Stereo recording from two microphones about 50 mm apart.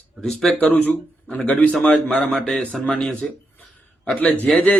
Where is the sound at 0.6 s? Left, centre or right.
Left.